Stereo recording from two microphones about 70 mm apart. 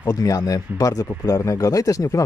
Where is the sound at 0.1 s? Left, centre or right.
Left.